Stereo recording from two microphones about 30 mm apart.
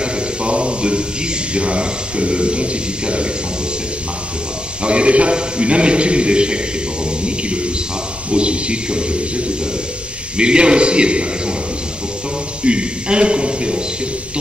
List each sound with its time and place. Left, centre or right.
0.0 s a sound: right
1.5 s a man's voice: right
4.8 s a man's voice: right
10.3 s a man's voice: right
12.6 s a man's voice: right